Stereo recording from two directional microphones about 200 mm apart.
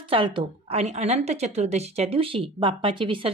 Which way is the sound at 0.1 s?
25° right (ahead or behind).